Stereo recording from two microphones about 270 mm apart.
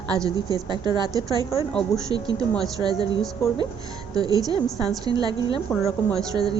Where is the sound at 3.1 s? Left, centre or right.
Centre.